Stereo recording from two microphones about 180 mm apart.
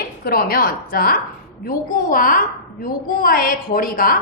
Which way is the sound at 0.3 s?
55° left (ahead or behind).